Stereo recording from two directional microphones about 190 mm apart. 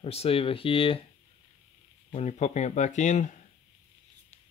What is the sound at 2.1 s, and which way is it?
Speech, 35° left (ahead or behind).